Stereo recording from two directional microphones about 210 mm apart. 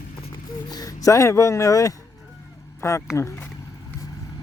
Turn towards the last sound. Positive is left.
turn(degrees=10)  # may be behind; listen again after turning